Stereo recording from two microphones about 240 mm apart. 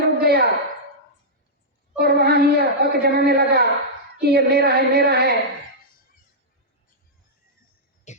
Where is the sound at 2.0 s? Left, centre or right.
Right.